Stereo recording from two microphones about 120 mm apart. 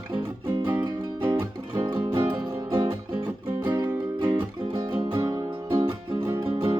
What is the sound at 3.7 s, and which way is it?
Music, 35° right (ahead or behind).